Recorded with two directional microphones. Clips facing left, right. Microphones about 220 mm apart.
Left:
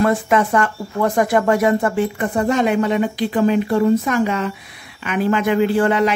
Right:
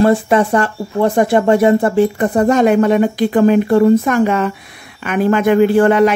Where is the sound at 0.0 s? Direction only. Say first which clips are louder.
Right 5 dB; 30° right (ahead or behind).